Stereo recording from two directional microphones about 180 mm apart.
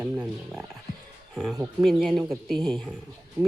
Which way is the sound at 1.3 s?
Centre (ahead or behind).